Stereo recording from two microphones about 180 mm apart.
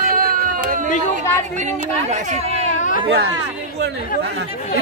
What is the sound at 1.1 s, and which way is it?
Speech, 40° right (ahead or behind).